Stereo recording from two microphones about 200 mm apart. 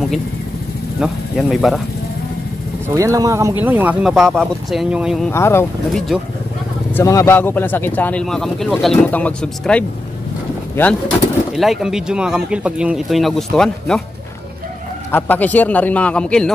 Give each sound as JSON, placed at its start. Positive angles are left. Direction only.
{"t": 0.9, "sound": "speech", "side_deg": 0}
{"t": 2.9, "sound": "speech", "side_deg": -15}
{"t": 5.3, "sound": "speech", "side_deg": 10}
{"t": 11.5, "sound": "speech", "side_deg": 0}
{"t": 15.0, "sound": "speech", "side_deg": 10}